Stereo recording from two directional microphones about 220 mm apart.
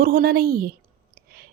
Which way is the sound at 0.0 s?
40° right (ahead or behind).